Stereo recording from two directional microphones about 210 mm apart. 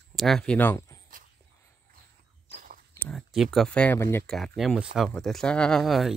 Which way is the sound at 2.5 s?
40° right (ahead or behind).